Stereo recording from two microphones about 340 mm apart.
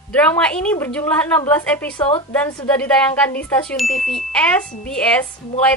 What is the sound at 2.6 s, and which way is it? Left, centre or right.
A woman's voice, centre.